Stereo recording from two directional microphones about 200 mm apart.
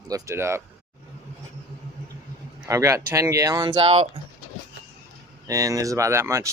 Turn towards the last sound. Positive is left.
turn(degrees=-15)  # may be behind; listen again after turning